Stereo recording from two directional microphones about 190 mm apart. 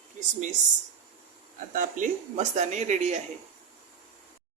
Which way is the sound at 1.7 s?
45° right (ahead or behind).